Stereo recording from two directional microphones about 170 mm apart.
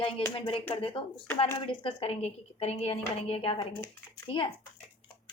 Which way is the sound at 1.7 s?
30° left (ahead or behind).